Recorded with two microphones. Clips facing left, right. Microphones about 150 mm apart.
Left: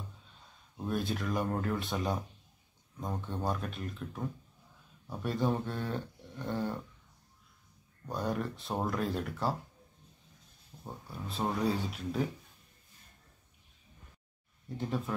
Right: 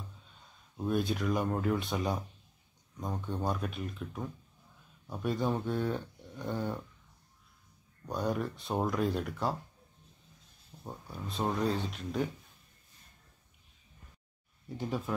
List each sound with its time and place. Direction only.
0.7 s speech: centre (ahead or behind)
8.1 s speech: centre (ahead or behind)
11.1 s speech: centre (ahead or behind)
14.8 s speech: centre (ahead or behind)